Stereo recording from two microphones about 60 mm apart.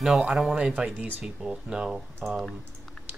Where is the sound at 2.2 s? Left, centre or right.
Centre.